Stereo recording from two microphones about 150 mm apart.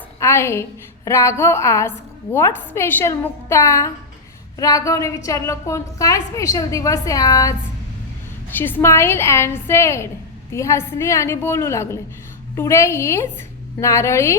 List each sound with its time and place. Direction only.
0.2 s a woman's voice: 15° left (ahead or behind)
8.4 s a woman's voice: 15° left (ahead or behind)